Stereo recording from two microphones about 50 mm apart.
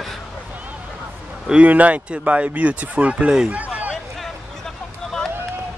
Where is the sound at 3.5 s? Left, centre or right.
Right.